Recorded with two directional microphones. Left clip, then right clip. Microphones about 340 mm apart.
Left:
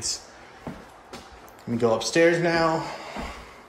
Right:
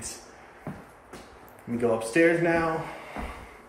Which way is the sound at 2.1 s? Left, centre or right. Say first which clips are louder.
Left 1 dB; centre.